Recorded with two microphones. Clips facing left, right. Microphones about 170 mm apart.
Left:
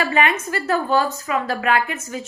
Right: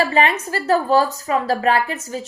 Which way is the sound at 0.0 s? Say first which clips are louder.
Right 2 dB; 35° right (ahead or behind).